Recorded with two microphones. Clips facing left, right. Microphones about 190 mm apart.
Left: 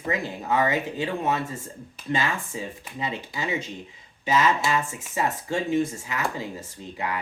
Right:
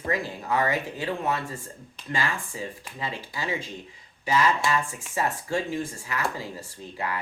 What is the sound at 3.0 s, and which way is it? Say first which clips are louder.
Speech: left 3 dB; 20° left (ahead or behind).